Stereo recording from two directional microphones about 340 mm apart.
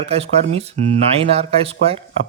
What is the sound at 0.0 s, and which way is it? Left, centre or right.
Speech, centre.